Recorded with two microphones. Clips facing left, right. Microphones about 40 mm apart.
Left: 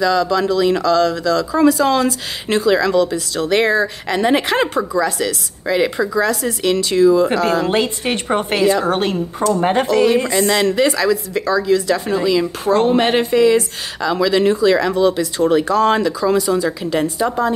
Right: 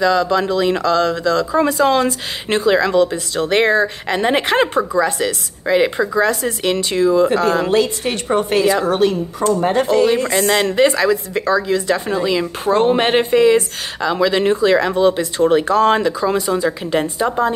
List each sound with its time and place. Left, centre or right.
0.0 s speech: right
7.7 s a woman's voice: left
10.3 s speech: right